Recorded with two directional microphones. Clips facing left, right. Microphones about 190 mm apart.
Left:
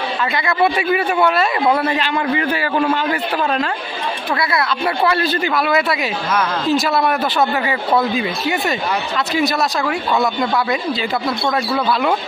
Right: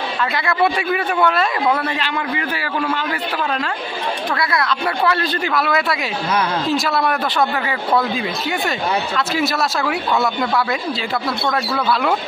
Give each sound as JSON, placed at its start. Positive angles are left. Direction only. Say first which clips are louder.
{"t": 0.3, "sound": "speech", "louder": "left 1 dB", "side_deg": 0}
{"t": 2.1, "sound": "a man's voice", "louder": "left 5 dB", "side_deg": 30}
{"t": 4.4, "sound": "speech", "louder": "left 3 dB", "side_deg": 5}